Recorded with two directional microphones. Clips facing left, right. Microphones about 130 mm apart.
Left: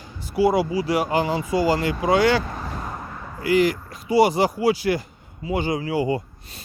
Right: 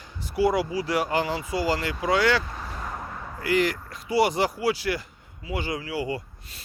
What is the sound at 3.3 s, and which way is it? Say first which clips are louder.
Speech: left 5 dB; 15° left (ahead or behind).